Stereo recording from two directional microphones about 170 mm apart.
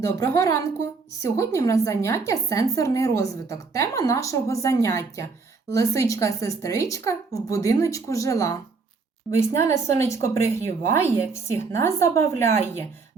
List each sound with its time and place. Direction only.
0.0 s a woman's voice: 20° left (ahead or behind)